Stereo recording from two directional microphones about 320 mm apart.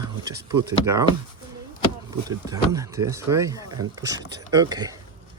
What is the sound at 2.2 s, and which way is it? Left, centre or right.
Speech, centre.